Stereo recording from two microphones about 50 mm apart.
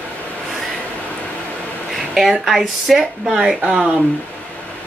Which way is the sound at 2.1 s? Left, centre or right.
Centre.